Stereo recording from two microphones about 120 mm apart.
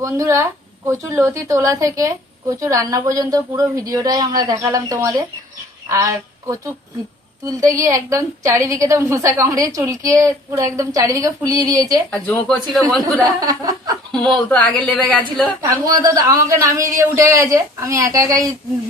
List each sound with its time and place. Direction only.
0.0 s a woman's voice: 25° right (ahead or behind)
12.1 s a woman's voice: 15° left (ahead or behind)
13.4 s a woman's voice: 30° right (ahead or behind)
14.1 s a woman's voice: 10° left (ahead or behind)
15.6 s a woman's voice: 30° right (ahead or behind)